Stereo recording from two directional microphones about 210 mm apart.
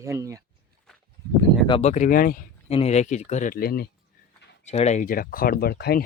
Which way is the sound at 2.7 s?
30° left (ahead or behind).